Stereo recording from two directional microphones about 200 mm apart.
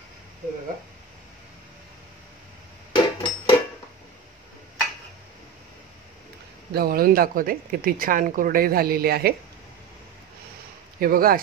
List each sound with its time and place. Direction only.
2.9 s hammer: 25° left (ahead or behind)
6.7 s speech: 50° right (ahead or behind)
11.0 s speech: 45° right (ahead or behind)